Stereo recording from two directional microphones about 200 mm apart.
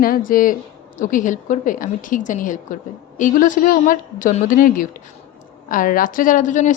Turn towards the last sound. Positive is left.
turn(degrees=40)  # may be behind; listen again after turning